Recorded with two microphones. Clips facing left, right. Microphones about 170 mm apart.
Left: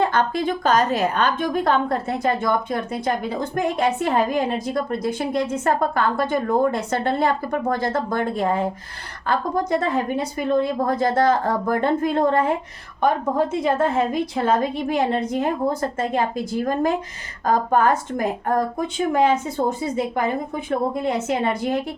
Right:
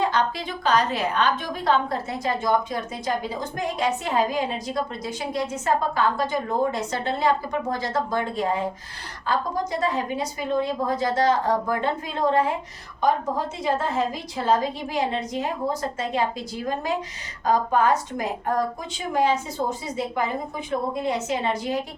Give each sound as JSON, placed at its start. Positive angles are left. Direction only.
{"t": 0.0, "sound": "a woman's voice", "side_deg": 55}